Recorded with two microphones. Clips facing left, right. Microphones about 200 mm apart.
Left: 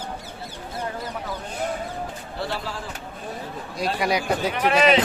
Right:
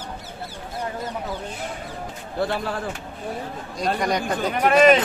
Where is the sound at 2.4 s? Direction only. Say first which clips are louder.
Right 6 dB; 55° right (ahead or behind).